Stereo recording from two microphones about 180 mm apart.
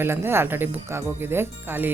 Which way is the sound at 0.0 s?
15° right (ahead or behind).